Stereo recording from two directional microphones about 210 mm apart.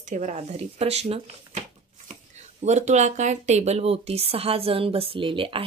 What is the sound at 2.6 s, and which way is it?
A woman's voice, 35° right (ahead or behind).